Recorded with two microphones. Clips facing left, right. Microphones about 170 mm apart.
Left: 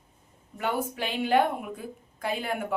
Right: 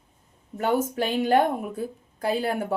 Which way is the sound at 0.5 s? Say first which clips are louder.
Right 6 dB; 45° right (ahead or behind).